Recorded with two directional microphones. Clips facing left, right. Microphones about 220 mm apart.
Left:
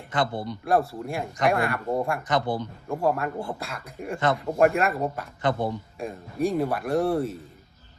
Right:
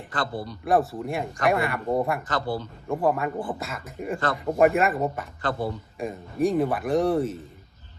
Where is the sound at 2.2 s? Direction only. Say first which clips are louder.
Left 2 dB; 20° left (ahead or behind).